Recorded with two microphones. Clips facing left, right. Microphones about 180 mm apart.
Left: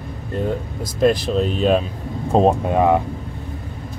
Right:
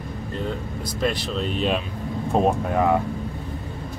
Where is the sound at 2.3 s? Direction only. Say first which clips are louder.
Left 5 dB; 25° left (ahead or behind).